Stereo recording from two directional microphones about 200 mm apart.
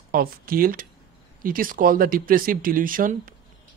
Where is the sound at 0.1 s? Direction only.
45° right (ahead or behind).